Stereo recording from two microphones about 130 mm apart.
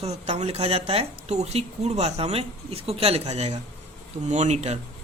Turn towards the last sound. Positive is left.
turn(degrees=-60)  # may be behind; listen again after turning